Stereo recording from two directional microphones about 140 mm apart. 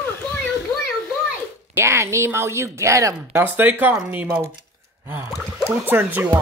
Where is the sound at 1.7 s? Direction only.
20° right (ahead or behind).